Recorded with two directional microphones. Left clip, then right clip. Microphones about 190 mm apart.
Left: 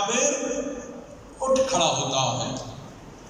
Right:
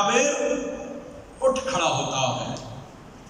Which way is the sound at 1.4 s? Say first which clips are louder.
Left 1 dB; 20° left (ahead or behind).